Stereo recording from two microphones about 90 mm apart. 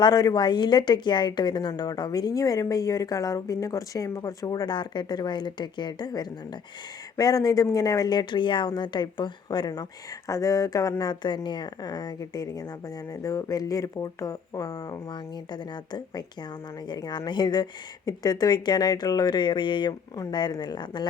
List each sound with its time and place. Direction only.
0.0 s a woman's voice: 45° left (ahead or behind)
4.7 s a woman's voice: 55° left (ahead or behind)
10.2 s speech: 40° left (ahead or behind)
11.0 s a woman's voice: 55° left (ahead or behind)